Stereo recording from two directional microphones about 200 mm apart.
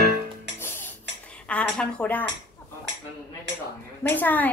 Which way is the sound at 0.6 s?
10° left (ahead or behind).